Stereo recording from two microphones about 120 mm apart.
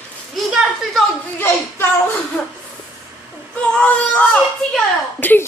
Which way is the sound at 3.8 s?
10° left (ahead or behind).